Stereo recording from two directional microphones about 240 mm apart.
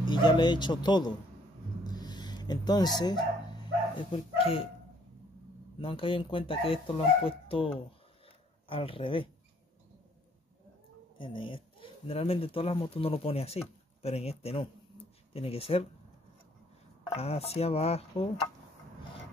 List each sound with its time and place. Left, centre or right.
0.0 s speech: centre
1.9 s a sound: centre
3.0 s dog: centre
4.1 s speech: left
5.8 s speech: left
11.1 s speech: left
17.1 s speech: left